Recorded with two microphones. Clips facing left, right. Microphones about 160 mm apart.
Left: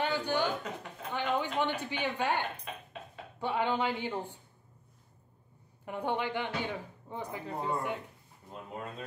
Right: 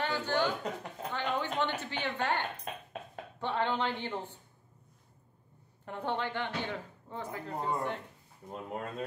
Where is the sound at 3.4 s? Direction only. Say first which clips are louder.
Left 1 dB; 10° left (ahead or behind).